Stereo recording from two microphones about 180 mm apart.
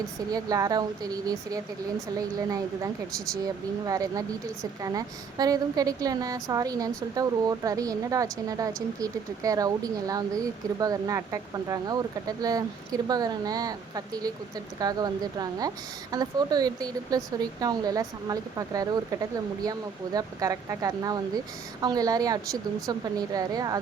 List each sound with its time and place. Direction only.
0.3 s a woman's voice: 20° right (ahead or behind)